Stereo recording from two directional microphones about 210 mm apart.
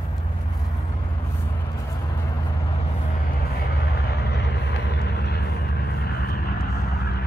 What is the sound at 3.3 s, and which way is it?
Vehicle, 45° left (ahead or behind).